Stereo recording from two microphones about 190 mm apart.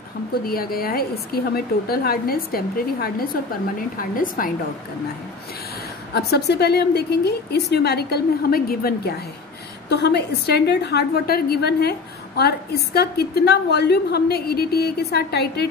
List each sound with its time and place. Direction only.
0.3 s a woman's voice: 50° left (ahead or behind)
6.1 s a woman's voice: 60° left (ahead or behind)